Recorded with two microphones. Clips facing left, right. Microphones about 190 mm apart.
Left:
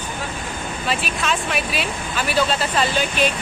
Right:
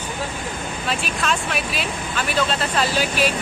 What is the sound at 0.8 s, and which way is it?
Speech, centre (ahead or behind).